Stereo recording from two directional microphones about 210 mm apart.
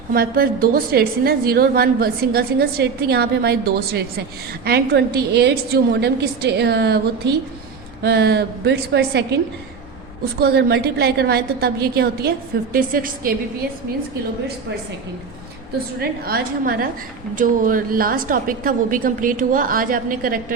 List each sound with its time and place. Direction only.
0.1 s a woman's voice: 45° right (ahead or behind)
10.4 s a woman's voice: 50° right (ahead or behind)
16.0 s a woman's voice: 45° right (ahead or behind)